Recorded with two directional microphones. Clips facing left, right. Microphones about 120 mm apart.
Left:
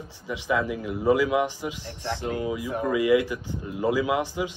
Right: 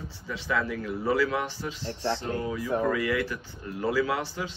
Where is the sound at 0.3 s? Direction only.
15° left (ahead or behind).